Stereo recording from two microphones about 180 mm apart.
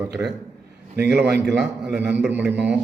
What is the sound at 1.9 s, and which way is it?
Speech, 70° right (ahead or behind).